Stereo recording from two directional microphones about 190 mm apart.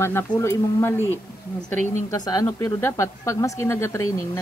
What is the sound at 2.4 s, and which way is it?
Speech, 15° left (ahead or behind).